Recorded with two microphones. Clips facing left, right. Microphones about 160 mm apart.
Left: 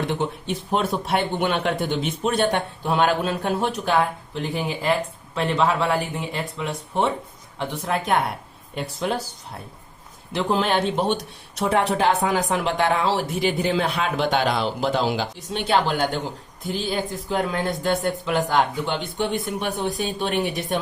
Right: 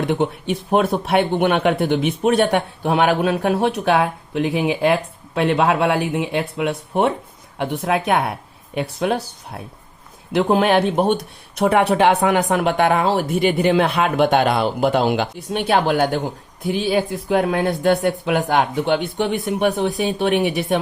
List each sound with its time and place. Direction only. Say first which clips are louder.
0.1 s speech: right 5 dB; 60° right (ahead or behind)
10.3 s speech: right 6 dB; 60° right (ahead or behind)